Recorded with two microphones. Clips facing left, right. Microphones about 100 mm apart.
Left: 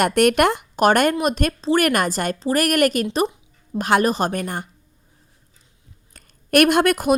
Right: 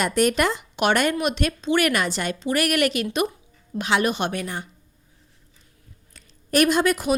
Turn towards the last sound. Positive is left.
turn(degrees=50)  # may be behind; listen again after turning